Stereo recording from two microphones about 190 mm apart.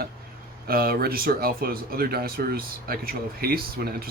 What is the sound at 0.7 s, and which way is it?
Speech, 50° right (ahead or behind).